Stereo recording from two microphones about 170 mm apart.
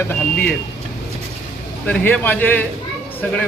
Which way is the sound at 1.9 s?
10° left (ahead or behind).